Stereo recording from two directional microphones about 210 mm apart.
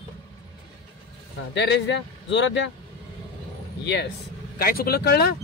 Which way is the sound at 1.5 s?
55° left (ahead or behind).